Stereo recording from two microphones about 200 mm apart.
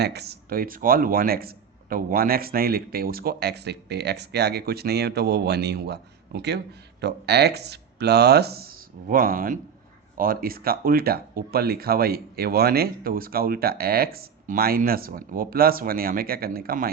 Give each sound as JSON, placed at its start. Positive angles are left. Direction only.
{"t": 0.0, "sound": "speech", "side_deg": -55}